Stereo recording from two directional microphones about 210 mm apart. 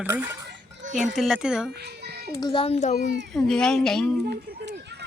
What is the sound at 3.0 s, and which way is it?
Speech, 55° right (ahead or behind).